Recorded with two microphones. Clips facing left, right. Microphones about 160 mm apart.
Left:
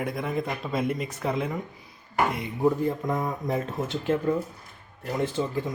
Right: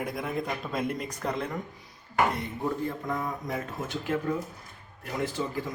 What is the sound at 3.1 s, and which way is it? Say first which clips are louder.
Speech: left 4 dB; 20° left (ahead or behind).